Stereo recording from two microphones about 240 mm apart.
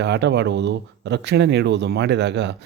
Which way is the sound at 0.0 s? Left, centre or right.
Right.